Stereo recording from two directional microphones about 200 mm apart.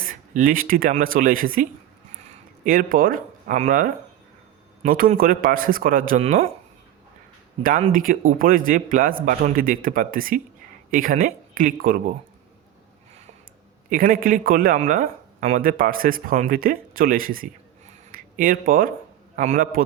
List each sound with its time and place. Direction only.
0.0 s speech: 45° right (ahead or behind)
2.6 s a man's voice: 45° right (ahead or behind)
7.6 s a man's voice: 45° right (ahead or behind)
13.9 s a man's voice: 45° right (ahead or behind)